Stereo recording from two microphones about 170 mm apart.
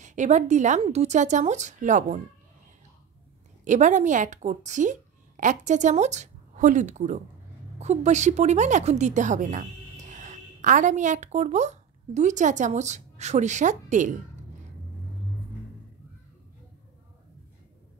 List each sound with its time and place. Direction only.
0.0 s a woman's voice: 45° right (ahead or behind)
3.6 s a woman's voice: 45° right (ahead or behind)